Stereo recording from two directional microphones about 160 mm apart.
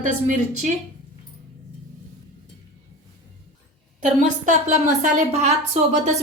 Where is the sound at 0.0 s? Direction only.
50° right (ahead or behind).